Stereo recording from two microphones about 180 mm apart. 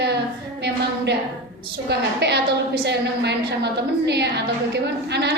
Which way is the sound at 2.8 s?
70° right (ahead or behind).